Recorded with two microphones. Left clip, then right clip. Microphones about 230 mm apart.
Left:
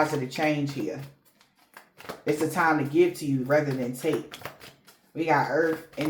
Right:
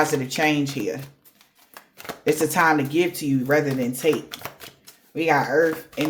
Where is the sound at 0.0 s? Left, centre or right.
Right.